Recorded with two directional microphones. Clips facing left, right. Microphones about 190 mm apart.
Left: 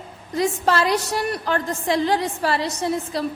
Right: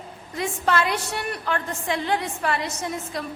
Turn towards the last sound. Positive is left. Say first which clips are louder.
# left 6 dB
turn(degrees=35)  # may be behind; listen again after turning